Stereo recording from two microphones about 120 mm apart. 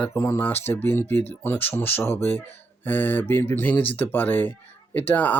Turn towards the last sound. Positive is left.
turn(degrees=15)  # may be behind; listen again after turning